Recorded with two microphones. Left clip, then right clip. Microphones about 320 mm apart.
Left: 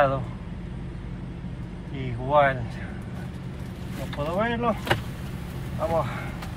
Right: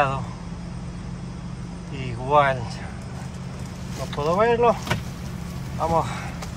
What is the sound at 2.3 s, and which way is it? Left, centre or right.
Speech, centre.